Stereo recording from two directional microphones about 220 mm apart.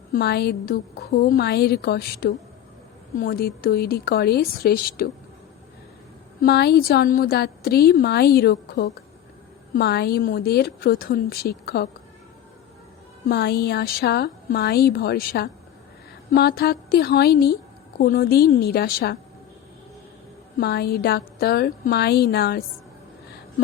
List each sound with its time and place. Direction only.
0.1 s a woman's voice: 45° left (ahead or behind)
6.4 s a woman's voice: 45° left (ahead or behind)
13.2 s a woman's voice: 45° left (ahead or behind)
20.6 s a woman's voice: 45° left (ahead or behind)